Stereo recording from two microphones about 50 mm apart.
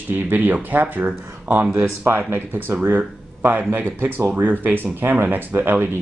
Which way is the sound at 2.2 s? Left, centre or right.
Right.